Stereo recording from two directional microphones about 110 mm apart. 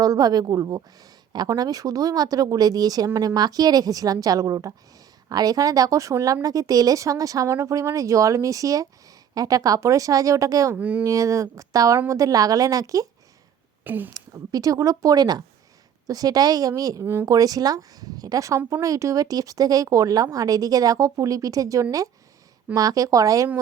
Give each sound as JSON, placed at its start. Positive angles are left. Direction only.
{"t": 0.0, "sound": "speech", "side_deg": -35}
{"t": 10.8, "sound": "speech", "side_deg": -10}
{"t": 11.0, "sound": "speech", "side_deg": -30}
{"t": 13.8, "sound": "speech", "side_deg": -15}
{"t": 14.1, "sound": "speech", "side_deg": -35}